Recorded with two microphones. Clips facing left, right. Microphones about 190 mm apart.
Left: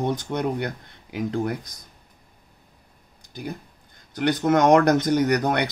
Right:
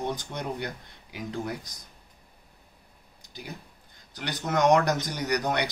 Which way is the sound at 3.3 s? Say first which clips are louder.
Left 8 dB; 50° left (ahead or behind).